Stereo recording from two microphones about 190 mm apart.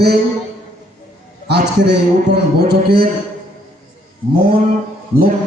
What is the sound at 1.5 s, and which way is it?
A man's voice, 60° right (ahead or behind).